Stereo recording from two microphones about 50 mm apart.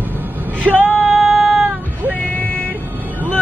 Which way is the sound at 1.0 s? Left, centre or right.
Centre.